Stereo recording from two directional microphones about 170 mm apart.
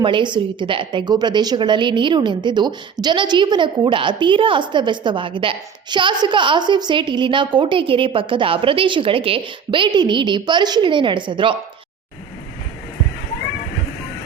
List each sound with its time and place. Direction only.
0.0 s a woman's voice: 30° right (ahead or behind)